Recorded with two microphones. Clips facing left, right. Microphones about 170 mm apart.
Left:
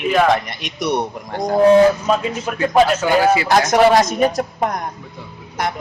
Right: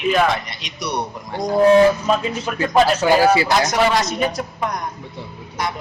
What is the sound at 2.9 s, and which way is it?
Speech, 35° right (ahead or behind).